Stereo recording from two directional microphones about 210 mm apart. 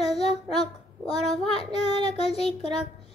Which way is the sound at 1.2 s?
Centre (ahead or behind).